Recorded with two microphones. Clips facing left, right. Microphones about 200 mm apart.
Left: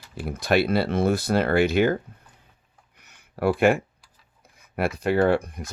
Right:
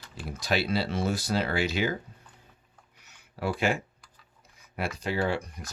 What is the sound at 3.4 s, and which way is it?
Speech, 55° left (ahead or behind).